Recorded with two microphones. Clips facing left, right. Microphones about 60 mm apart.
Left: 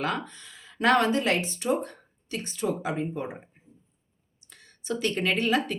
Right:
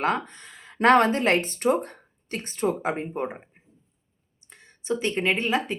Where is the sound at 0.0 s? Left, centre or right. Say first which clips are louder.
Right 4 dB; right.